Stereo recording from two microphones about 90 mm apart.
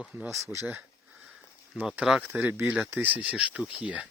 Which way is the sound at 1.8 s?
10° right (ahead or behind).